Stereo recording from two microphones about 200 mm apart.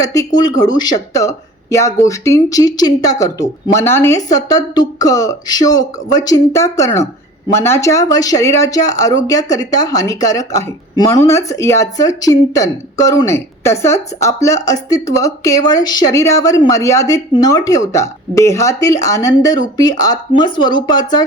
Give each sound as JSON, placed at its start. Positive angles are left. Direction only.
{"t": 0.0, "sound": "a woman's voice", "side_deg": 15}